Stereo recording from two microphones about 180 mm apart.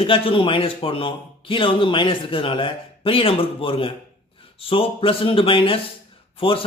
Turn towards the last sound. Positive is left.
turn(degrees=30)  # may be behind; listen again after turning